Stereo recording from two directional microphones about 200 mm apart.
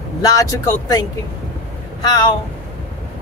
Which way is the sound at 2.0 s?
20° left (ahead or behind).